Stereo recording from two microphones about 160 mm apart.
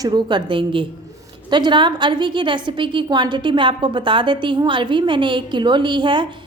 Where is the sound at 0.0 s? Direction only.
30° right (ahead or behind).